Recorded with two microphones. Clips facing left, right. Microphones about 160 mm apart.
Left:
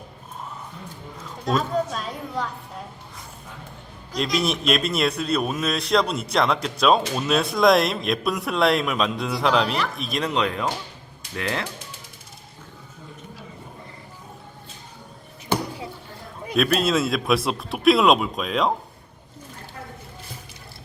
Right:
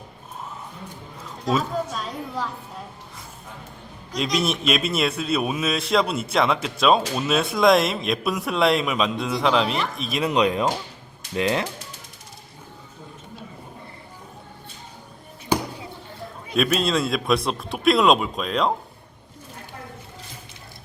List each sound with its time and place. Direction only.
1.5 s a man's voice: centre (ahead or behind)
4.1 s a man's voice: centre (ahead or behind)
10.2 s speech: 15° right (ahead or behind)
16.6 s a man's voice: centre (ahead or behind)